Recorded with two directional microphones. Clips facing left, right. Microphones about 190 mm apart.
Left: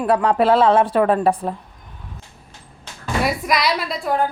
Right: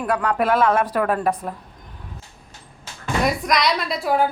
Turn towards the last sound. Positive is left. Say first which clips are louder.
# right 1 dB
turn(degrees=-5)  # may be behind; listen again after turning